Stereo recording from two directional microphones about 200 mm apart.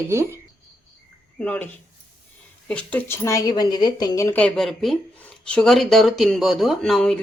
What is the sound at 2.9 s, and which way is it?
A woman's voice, 10° left (ahead or behind).